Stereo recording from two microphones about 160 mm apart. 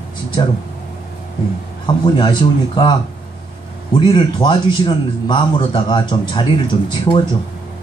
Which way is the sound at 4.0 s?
30° left (ahead or behind).